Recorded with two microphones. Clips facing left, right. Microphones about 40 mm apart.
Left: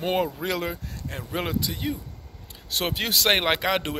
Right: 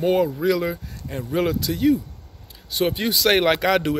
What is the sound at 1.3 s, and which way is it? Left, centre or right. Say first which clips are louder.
Speech: right 6 dB; left.